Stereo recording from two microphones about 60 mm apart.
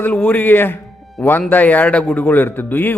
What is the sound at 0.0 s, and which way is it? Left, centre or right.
A man's voice, left.